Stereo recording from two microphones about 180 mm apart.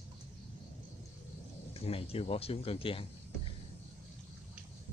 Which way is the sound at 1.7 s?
30° left (ahead or behind).